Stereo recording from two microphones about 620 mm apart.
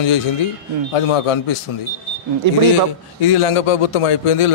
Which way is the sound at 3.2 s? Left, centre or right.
Left.